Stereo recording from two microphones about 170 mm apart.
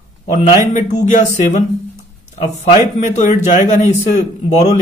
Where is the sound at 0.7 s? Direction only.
50° left (ahead or behind).